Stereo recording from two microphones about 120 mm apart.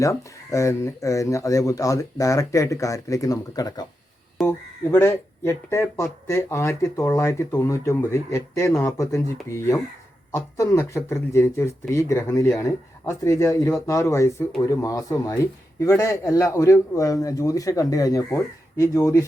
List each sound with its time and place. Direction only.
0.0 s speech: 25° left (ahead or behind)
4.4 s speech: 20° left (ahead or behind)